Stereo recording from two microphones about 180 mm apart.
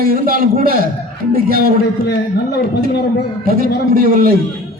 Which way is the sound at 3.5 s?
55° right (ahead or behind).